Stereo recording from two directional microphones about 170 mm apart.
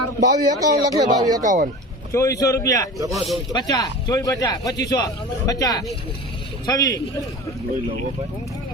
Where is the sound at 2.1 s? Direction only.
20° left (ahead or behind).